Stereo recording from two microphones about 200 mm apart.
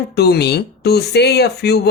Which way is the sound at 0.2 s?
55° left (ahead or behind).